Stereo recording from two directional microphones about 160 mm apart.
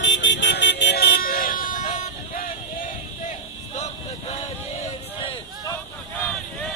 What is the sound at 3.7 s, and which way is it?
Vehicle, 45° left (ahead or behind).